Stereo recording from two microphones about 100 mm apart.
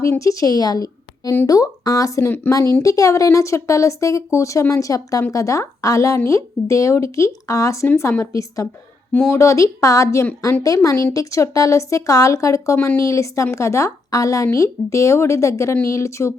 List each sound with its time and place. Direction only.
0.0 s a woman's voice: 35° left (ahead or behind)
2.2 s speech: 20° left (ahead or behind)
2.5 s speech: 35° left (ahead or behind)